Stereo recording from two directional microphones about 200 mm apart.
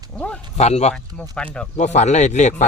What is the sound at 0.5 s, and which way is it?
Speech, 35° left (ahead or behind).